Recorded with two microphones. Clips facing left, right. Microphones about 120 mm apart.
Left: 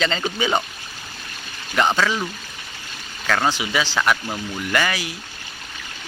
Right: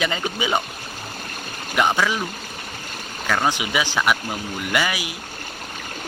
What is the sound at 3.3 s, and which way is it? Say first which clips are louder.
Speech: left 1 dB; 15° right (ahead or behind).